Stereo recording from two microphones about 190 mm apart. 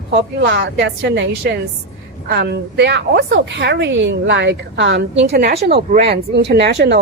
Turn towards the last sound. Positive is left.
turn(degrees=-65)  # may be behind; listen again after turning